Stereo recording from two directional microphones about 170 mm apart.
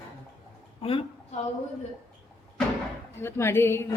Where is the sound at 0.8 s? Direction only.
35° left (ahead or behind).